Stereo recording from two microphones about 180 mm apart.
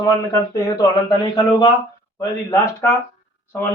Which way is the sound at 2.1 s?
15° left (ahead or behind).